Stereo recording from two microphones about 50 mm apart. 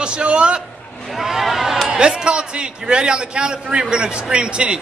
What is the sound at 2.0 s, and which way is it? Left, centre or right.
A man's voice, centre.